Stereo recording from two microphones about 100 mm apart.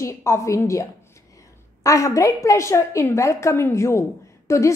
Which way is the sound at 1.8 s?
30° left (ahead or behind).